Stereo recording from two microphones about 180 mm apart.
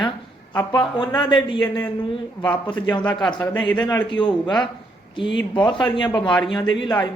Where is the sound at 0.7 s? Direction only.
25° left (ahead or behind).